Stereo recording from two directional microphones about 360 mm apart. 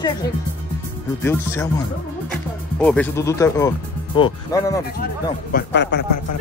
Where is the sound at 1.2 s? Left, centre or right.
Centre.